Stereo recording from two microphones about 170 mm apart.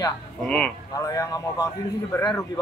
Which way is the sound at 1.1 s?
20° left (ahead or behind).